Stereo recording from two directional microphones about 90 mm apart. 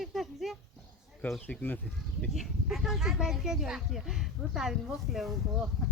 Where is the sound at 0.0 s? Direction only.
Centre (ahead or behind).